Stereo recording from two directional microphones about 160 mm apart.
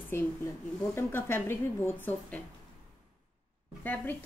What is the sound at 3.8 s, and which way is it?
Speech, 10° left (ahead or behind).